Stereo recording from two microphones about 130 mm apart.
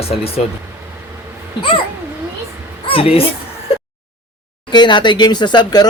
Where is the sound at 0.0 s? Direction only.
50° left (ahead or behind).